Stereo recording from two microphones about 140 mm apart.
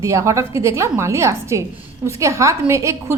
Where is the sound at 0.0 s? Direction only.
20° right (ahead or behind).